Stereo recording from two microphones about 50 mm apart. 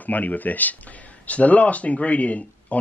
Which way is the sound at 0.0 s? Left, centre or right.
Left.